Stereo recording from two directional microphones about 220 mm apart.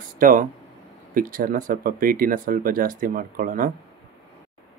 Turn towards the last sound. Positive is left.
turn(degrees=-40)  # may be behind; listen again after turning